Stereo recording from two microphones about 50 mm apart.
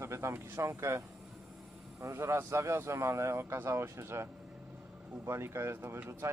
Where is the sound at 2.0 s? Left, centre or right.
Right.